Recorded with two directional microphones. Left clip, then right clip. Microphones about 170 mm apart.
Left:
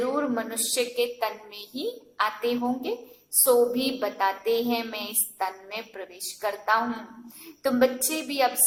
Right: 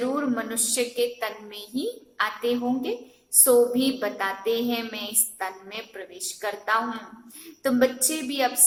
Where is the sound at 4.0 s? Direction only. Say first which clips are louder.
Left 2 dB; 45° left (ahead or behind).